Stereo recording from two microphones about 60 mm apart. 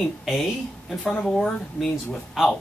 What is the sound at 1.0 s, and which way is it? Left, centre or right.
Speech, left.